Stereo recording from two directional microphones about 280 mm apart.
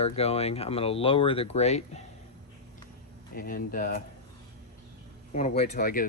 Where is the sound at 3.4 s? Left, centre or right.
Left.